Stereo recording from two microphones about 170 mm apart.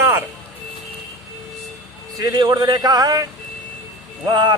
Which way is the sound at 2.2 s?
25° right (ahead or behind).